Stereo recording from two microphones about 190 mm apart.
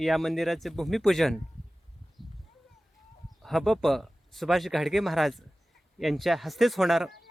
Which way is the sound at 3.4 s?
Centre (ahead or behind).